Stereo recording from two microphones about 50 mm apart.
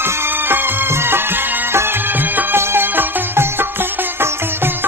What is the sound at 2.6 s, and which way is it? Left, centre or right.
Music, right.